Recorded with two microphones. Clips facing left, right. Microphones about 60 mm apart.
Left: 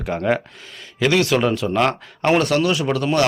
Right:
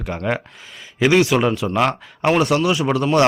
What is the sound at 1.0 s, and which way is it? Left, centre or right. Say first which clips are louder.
Speech: right 2 dB; centre.